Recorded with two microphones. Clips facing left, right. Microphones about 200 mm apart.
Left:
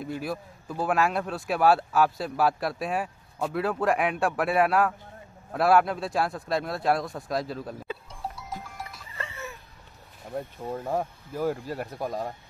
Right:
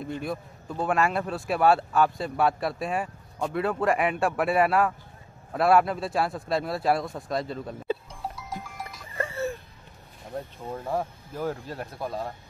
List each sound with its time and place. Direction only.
0.0 s speech: 5° left (ahead or behind)
8.5 s goat: centre (ahead or behind)
9.1 s music: 50° right (ahead or behind)
10.3 s speech: 5° left (ahead or behind)